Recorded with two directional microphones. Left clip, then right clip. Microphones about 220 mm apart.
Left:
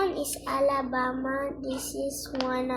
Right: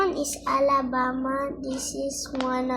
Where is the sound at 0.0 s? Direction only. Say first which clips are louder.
Right 3 dB; 20° right (ahead or behind).